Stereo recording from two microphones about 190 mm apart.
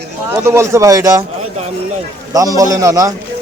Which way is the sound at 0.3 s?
15° right (ahead or behind).